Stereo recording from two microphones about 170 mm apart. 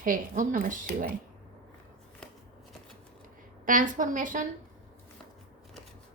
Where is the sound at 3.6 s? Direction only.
50° right (ahead or behind).